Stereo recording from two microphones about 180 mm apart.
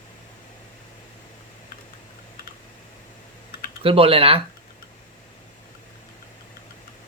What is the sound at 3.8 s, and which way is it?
Speech, 30° right (ahead or behind).